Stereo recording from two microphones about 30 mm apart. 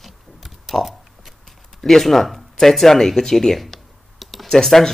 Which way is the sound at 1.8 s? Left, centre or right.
Centre.